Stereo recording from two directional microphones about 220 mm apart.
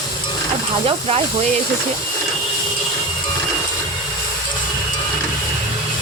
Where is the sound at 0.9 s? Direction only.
30° right (ahead or behind).